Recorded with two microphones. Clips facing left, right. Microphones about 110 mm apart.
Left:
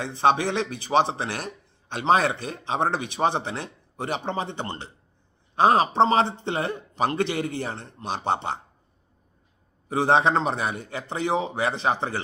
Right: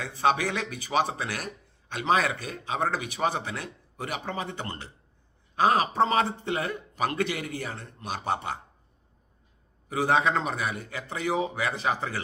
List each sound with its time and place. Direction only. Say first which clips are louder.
0.0 s speech: left 4 dB; 25° left (ahead or behind)
9.9 s speech: left 4 dB; 30° left (ahead or behind)